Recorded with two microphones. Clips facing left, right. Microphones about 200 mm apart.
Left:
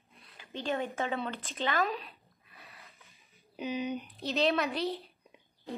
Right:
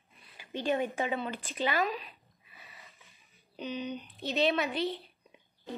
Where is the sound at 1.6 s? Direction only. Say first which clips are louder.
Right 1 dB; 5° right (ahead or behind).